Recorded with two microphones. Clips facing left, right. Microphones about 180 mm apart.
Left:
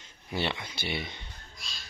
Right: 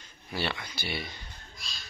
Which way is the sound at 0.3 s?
20° left (ahead or behind).